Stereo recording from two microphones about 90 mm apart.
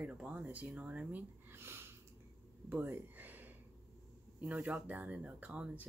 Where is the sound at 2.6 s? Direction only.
25° right (ahead or behind).